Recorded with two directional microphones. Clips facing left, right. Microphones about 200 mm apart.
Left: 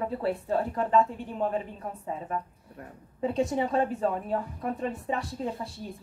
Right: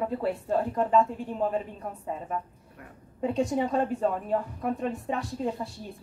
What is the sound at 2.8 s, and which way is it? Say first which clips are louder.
Speech: left 4 dB; 35° left (ahead or behind).